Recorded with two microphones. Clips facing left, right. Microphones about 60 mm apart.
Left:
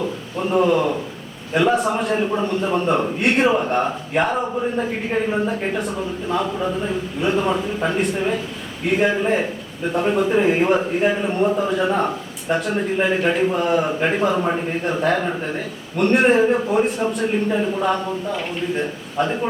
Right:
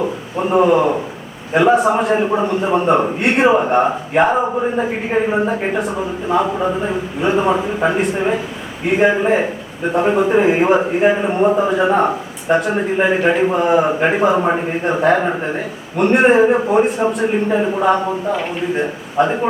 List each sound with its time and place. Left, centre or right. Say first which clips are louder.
0.0 s speech: right 4 dB; centre
1.5 s a man's voice: right 5 dB; centre
4.4 s speech: right 4 dB; centre
5.8 s speech: right 4 dB; centre
6.2 s a man's voice: right 6 dB; right
7.9 s a man's voice: right 4 dB; centre
9.1 s a man's voice: right 4 dB; centre
14.0 s speech: right 5 dB; centre
16.0 s a man's voice: right 4 dB; centre
17.3 s a man's voice: right 4 dB; right